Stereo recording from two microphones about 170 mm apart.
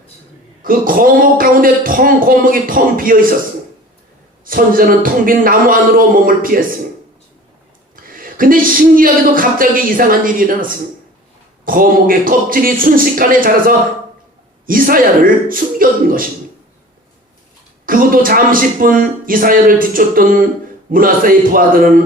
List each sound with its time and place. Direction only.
0.6 s speech: 55° right (ahead or behind)
4.4 s speech: 55° right (ahead or behind)
8.0 s speech: 55° right (ahead or behind)
17.8 s speech: 55° right (ahead or behind)